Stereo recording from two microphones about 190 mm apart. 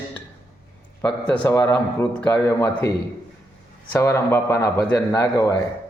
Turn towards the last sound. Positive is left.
turn(degrees=15)  # may be behind; listen again after turning